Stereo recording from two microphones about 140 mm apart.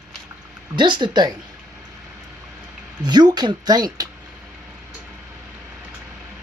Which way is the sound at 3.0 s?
30° right (ahead or behind).